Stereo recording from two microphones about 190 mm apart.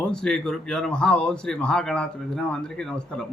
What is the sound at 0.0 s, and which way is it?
Speech, 5° left (ahead or behind).